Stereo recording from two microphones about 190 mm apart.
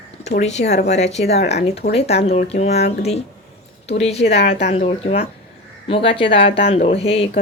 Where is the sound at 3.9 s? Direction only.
35° left (ahead or behind).